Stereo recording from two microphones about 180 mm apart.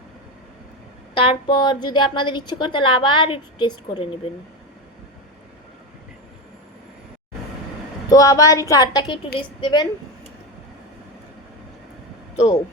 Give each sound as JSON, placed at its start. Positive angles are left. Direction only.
{"t": 1.1, "sound": "a woman's voice", "side_deg": 30}
{"t": 8.1, "sound": "a woman's voice", "side_deg": 20}